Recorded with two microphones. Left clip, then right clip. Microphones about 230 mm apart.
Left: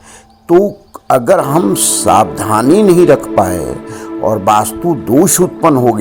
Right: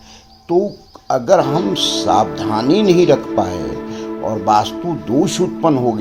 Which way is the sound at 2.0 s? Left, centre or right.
Left.